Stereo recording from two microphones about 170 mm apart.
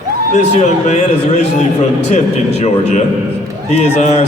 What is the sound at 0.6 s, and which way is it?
A man's voice, 40° left (ahead or behind).